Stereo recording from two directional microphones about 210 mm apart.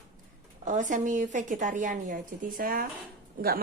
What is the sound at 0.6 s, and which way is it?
A woman's voice, 35° right (ahead or behind).